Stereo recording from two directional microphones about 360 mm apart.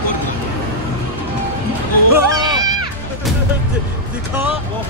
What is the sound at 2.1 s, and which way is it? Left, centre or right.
Speech, centre.